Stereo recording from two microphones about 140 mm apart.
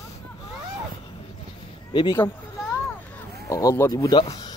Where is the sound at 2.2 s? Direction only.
15° left (ahead or behind).